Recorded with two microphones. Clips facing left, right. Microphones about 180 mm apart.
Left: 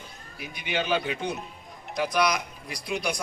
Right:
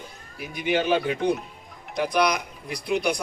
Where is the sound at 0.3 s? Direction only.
45° right (ahead or behind).